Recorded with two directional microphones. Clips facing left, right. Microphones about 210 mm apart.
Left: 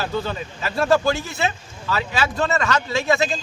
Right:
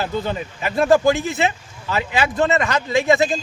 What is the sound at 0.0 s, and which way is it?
Speech, 20° right (ahead or behind).